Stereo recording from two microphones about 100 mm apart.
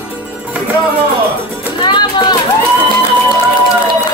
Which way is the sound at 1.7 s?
55° left (ahead or behind).